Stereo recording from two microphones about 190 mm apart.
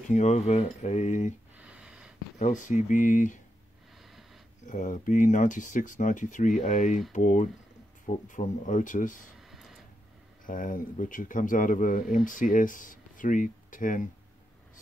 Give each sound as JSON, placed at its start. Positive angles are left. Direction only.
{"t": 0.1, "sound": "speech", "side_deg": 35}
{"t": 1.6, "sound": "a sound", "side_deg": -5}
{"t": 2.3, "sound": "speech", "side_deg": 40}
{"t": 4.6, "sound": "a man's voice", "side_deg": 40}
{"t": 9.5, "sound": "a sound", "side_deg": 0}
{"t": 10.4, "sound": "a man's voice", "side_deg": 45}